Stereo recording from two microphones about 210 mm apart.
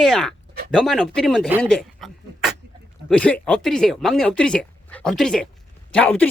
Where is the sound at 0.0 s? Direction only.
Centre (ahead or behind).